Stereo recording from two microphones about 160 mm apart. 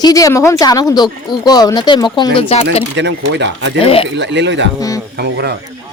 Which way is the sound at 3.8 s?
35° left (ahead or behind).